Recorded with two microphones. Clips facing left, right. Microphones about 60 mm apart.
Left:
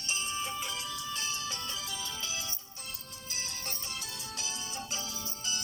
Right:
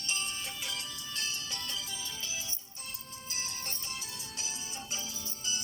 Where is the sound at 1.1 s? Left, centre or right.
Left.